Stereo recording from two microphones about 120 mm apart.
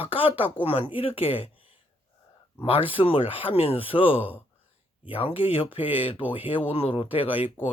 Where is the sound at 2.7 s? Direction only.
50° left (ahead or behind).